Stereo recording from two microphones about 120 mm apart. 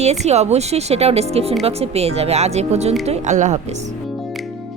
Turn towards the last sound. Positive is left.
turn(degrees=-80)